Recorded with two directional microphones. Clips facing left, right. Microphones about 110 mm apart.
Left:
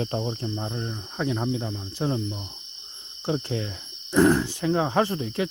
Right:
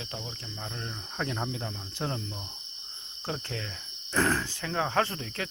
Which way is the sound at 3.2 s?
15° left (ahead or behind).